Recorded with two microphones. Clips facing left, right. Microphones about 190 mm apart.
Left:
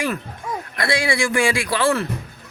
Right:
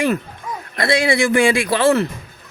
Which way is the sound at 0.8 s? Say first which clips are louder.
Right 5 dB; 20° right (ahead or behind).